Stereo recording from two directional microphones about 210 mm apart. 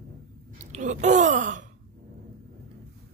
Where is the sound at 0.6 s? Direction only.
35° right (ahead or behind).